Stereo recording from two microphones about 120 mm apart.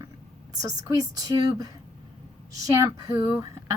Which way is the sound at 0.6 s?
30° right (ahead or behind).